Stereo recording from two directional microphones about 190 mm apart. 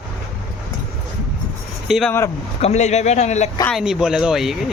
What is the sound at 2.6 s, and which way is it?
Speech, 35° left (ahead or behind).